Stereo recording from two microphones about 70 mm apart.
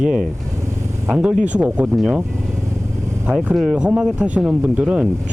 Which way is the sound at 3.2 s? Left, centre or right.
Centre.